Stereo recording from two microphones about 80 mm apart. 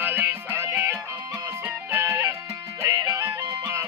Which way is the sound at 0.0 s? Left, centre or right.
Right.